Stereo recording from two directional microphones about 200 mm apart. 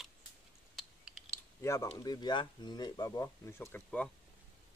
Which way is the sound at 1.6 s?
15° left (ahead or behind).